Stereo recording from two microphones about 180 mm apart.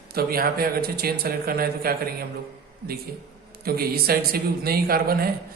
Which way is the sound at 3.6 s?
60° right (ahead or behind).